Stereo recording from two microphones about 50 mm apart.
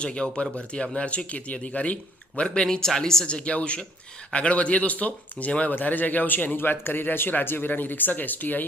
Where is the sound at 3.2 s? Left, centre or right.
Left.